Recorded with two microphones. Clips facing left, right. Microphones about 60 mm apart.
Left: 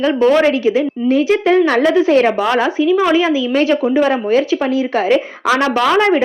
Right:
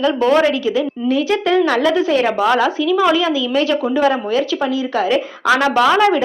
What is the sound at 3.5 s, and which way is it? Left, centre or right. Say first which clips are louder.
A woman's voice: left 3 dB; left.